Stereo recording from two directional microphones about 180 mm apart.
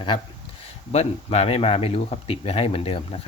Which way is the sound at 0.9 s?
35° left (ahead or behind).